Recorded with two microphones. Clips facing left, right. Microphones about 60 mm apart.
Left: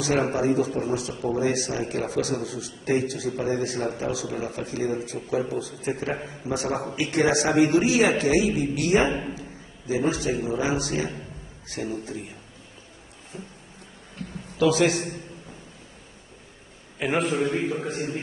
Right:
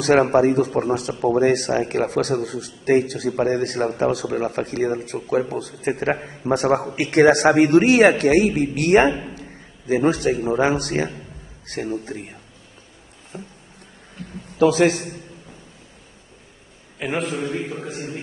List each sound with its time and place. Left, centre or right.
0.0 s a man's voice: right
14.6 s a man's voice: right
17.0 s a man's voice: centre
17.3 s a man's voice: left